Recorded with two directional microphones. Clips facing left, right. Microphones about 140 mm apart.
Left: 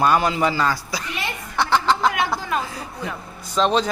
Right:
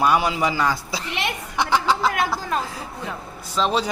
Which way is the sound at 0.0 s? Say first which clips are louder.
Left 1 dB; 10° right (ahead or behind).